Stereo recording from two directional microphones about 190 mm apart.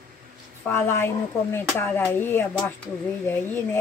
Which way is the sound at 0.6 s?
10° left (ahead or behind).